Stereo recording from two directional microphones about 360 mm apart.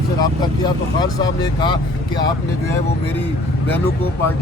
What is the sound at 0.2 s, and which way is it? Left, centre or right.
Speech, centre.